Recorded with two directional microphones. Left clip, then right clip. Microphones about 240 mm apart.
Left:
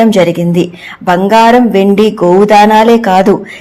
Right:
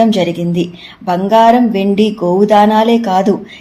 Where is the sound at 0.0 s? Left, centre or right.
Centre.